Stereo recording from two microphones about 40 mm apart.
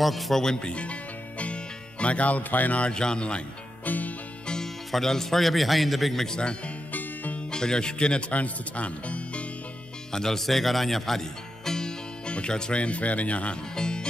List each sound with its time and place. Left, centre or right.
0.0 s a man's voice: centre
0.4 s speech: left
1.4 s music: left
2.8 s speech: centre
3.8 s music: left
4.9 s a man's voice: centre
6.2 s speech: centre
6.9 s music: left
7.5 s speech: centre
10.1 s speech: centre
12.3 s speech: left
13.7 s music: centre